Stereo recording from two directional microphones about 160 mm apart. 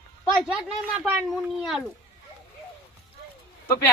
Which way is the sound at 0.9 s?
10° right (ahead or behind).